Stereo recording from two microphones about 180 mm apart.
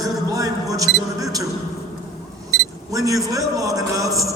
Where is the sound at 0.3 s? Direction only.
20° right (ahead or behind).